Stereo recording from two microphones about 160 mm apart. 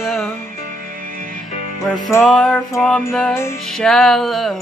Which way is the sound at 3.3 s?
15° left (ahead or behind).